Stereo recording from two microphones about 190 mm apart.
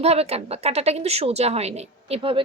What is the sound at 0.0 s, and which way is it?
A woman's voice, 35° right (ahead or behind).